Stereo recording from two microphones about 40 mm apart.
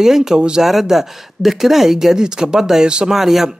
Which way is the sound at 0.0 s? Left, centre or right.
Centre.